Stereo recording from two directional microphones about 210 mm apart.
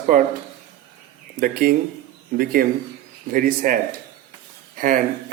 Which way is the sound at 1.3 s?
45° right (ahead or behind).